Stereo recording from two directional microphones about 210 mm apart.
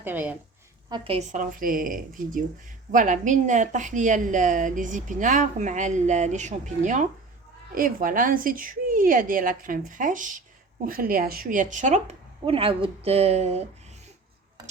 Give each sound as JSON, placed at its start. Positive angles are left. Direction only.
{"t": 0.0, "sound": "a woman's voice", "side_deg": -10}
{"t": 0.9, "sound": "a woman's voice", "side_deg": -25}